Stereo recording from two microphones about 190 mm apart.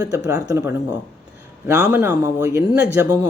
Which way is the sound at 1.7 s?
10° right (ahead or behind).